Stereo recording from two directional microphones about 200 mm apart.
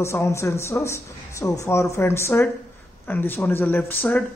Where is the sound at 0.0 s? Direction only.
15° left (ahead or behind).